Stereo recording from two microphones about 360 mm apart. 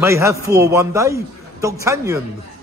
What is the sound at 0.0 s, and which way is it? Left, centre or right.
A man's voice, centre.